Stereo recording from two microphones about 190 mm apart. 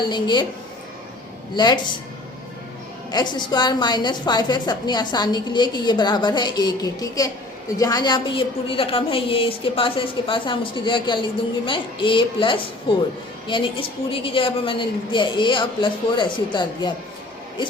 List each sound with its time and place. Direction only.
0.1 s a woman's voice: 20° left (ahead or behind)
1.5 s a woman's voice: 25° left (ahead or behind)
3.1 s a woman's voice: 20° left (ahead or behind)